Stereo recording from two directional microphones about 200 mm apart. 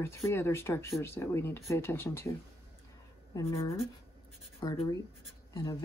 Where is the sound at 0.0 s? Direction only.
15° left (ahead or behind).